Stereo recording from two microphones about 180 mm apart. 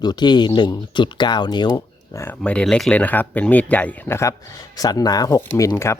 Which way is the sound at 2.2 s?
10° left (ahead or behind).